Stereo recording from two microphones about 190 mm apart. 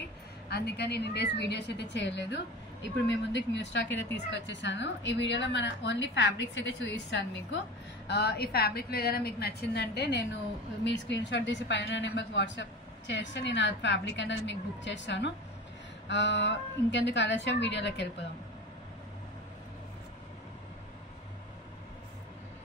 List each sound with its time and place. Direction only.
0.5 s a woman's voice: 60° left (ahead or behind)
8.1 s a woman's voice: 60° left (ahead or behind)